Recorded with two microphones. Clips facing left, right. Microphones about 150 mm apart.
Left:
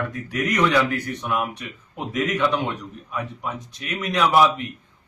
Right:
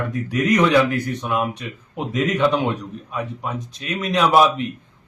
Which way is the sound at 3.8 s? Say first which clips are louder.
Right 2 dB; 25° right (ahead or behind).